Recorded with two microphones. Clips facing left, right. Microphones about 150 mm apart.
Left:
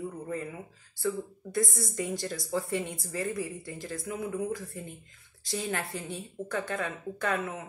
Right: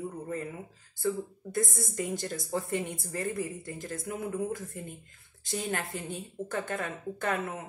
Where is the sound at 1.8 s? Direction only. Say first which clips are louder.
Even; 45° right (ahead or behind).